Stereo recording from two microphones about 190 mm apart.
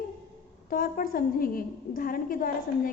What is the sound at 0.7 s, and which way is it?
A woman's voice, 50° left (ahead or behind).